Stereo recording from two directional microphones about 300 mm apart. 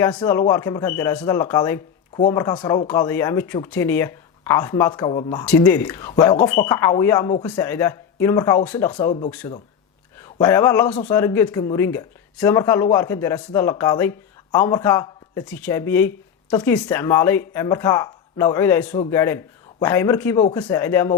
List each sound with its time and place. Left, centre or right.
0.0 s speech: centre